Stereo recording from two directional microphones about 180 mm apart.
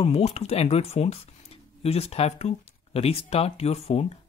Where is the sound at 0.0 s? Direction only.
35° left (ahead or behind).